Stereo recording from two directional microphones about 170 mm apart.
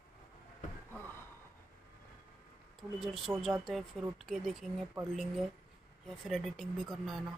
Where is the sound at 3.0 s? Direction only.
Centre (ahead or behind).